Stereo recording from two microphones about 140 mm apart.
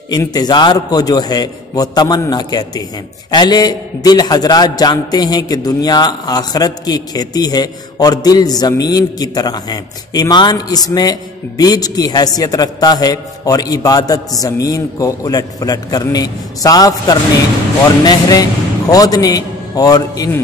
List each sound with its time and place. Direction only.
0.3 s a man's voice: 30° left (ahead or behind)